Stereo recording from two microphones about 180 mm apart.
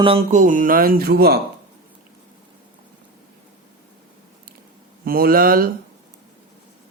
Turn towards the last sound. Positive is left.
turn(degrees=-55)  # may be behind; listen again after turning